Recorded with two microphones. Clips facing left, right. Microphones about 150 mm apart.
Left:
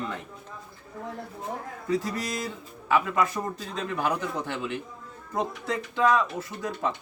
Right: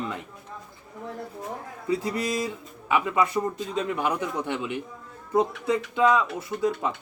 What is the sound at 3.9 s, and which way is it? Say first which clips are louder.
Speech: left 3 dB; 15° right (ahead or behind).